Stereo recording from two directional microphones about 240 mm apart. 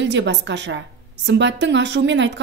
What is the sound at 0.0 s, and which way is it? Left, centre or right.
A woman's voice, right.